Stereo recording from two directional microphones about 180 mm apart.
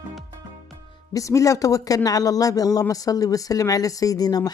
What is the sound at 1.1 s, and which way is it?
Speech, 20° left (ahead or behind).